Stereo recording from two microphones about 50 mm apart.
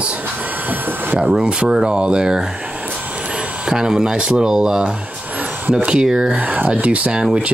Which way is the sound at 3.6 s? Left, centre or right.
Centre.